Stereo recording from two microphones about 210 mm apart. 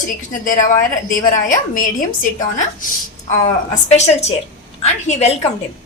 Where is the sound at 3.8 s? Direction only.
30° left (ahead or behind).